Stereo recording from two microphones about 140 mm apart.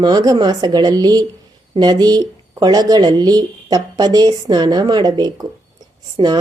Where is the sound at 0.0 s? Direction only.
30° right (ahead or behind).